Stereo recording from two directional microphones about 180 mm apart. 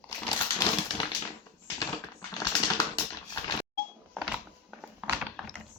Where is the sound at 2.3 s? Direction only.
20° left (ahead or behind).